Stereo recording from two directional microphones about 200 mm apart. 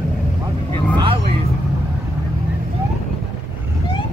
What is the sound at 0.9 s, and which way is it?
Vehicle, 25° right (ahead or behind).